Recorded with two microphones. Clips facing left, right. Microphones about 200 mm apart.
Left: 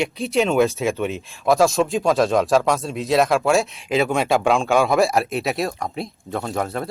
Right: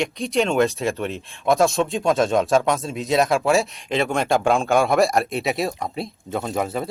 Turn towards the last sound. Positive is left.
turn(degrees=-5)  # may be behind; listen again after turning